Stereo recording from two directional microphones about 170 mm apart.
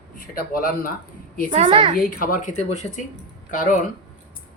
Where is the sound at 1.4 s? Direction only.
35° right (ahead or behind).